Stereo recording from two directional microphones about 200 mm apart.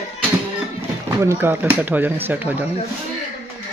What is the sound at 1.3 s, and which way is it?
Speech, 10° right (ahead or behind).